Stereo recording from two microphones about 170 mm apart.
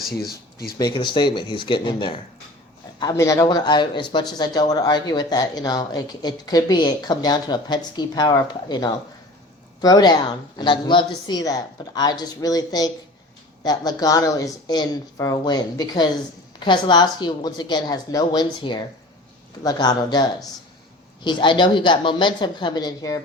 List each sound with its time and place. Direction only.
0.0 s speech: 65° left (ahead or behind)
0.8 s speech: 25° left (ahead or behind)
21.2 s speech: 25° left (ahead or behind)